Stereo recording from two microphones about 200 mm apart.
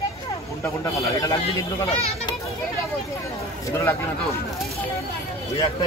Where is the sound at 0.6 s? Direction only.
15° left (ahead or behind).